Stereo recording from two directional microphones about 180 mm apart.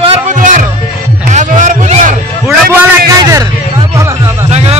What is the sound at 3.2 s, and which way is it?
Speech, 20° right (ahead or behind).